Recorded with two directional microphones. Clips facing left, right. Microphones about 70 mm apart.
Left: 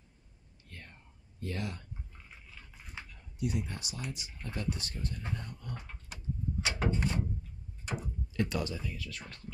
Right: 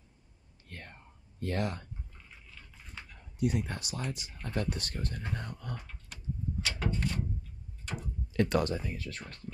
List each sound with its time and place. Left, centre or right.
0.7 s whispering: right
1.4 s speech: right
2.7 s dog: centre
3.3 s speech: right
6.1 s door: left
7.8 s tick-tock: centre
8.3 s speech: right